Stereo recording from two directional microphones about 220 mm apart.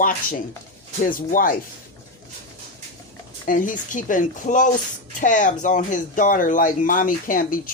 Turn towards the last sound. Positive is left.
turn(degrees=40)  # may be behind; listen again after turning